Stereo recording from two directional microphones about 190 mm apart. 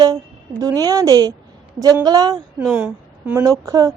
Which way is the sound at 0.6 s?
20° right (ahead or behind).